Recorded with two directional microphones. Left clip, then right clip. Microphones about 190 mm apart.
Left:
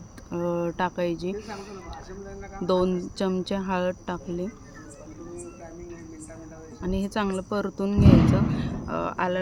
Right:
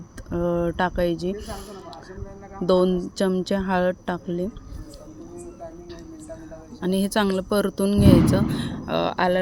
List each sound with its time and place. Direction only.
0.3 s speech: 20° right (ahead or behind)
6.8 s speech: 30° right (ahead or behind)